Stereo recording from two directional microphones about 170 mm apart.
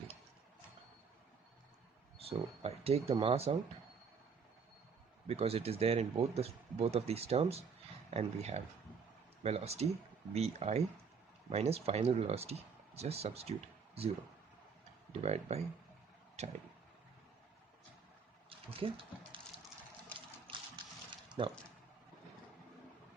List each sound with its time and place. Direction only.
2.1 s speech: 35° right (ahead or behind)
5.3 s speech: 35° right (ahead or behind)
15.1 s speech: 40° right (ahead or behind)
18.4 s speech: 30° right (ahead or behind)
20.5 s a sound: 30° right (ahead or behind)
21.4 s speech: 30° right (ahead or behind)